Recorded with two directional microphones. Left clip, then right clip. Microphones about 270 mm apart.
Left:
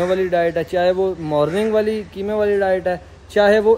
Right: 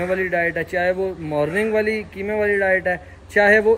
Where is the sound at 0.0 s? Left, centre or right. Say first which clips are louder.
Left 3 dB; centre.